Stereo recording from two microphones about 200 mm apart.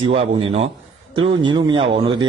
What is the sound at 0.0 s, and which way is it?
Speech, 25° right (ahead or behind).